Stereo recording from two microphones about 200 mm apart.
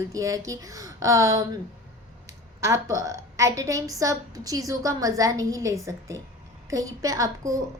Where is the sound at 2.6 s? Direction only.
15° right (ahead or behind).